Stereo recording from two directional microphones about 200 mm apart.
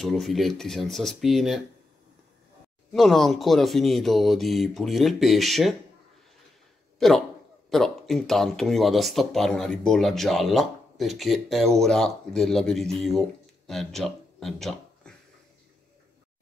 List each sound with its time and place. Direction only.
0.0 s speech: centre (ahead or behind)
2.9 s speech: centre (ahead or behind)
7.0 s speech: centre (ahead or behind)